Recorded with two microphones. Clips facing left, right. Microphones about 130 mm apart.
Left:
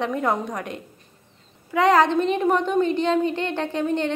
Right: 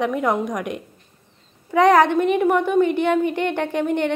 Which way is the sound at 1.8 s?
15° right (ahead or behind).